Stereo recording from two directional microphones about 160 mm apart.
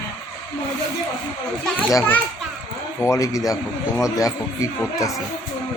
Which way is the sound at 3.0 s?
20° left (ahead or behind).